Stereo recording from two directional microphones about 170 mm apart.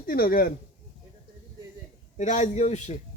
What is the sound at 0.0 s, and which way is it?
Speech, 55° left (ahead or behind).